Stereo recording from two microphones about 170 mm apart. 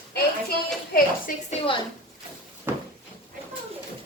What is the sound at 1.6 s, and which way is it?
Speech, 35° left (ahead or behind).